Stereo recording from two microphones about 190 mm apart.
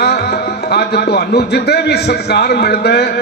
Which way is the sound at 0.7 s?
60° left (ahead or behind).